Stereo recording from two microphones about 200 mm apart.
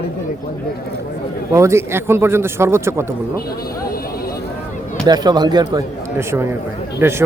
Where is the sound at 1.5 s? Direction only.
15° right (ahead or behind).